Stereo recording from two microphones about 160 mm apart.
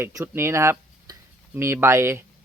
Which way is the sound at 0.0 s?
20° right (ahead or behind).